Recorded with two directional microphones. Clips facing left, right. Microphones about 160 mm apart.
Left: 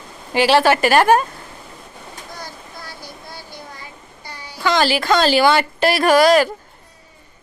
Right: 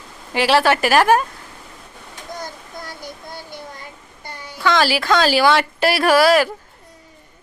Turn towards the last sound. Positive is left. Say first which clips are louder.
# left 1 dB
turn(degrees=-5)  # may be behind; listen again after turning